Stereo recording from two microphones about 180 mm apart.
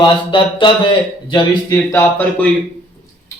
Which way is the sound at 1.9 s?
10° left (ahead or behind).